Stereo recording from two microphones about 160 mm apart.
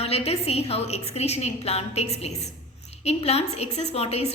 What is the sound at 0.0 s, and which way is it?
A woman's voice, 40° left (ahead or behind).